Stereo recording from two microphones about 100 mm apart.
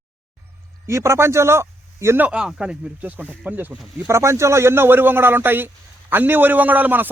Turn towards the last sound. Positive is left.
turn(degrees=-20)  # may be behind; listen again after turning